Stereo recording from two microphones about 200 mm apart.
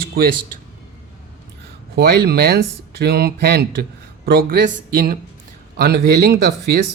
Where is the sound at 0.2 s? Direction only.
45° right (ahead or behind).